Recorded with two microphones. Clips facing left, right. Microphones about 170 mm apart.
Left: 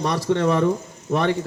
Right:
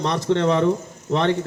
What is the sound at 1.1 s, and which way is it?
Speech, 10° left (ahead or behind).